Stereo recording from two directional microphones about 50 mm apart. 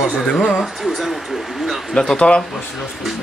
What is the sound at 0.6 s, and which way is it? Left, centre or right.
Speech, centre.